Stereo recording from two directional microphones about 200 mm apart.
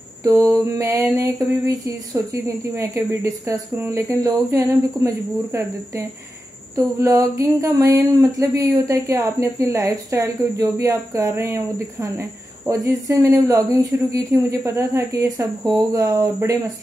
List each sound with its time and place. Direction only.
0.5 s speech: 15° right (ahead or behind)